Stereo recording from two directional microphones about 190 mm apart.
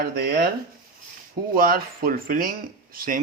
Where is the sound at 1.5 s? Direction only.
50° right (ahead or behind).